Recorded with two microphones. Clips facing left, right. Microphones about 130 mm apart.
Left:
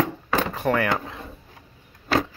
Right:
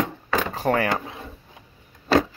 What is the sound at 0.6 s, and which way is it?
Speech, 35° right (ahead or behind).